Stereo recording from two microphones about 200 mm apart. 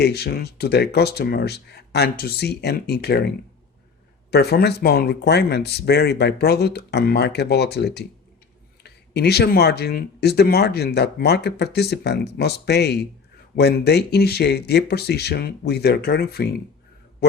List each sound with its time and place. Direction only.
0.0 s speech: 55° left (ahead or behind)